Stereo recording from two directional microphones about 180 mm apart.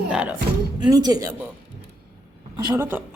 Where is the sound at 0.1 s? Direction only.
5° right (ahead or behind).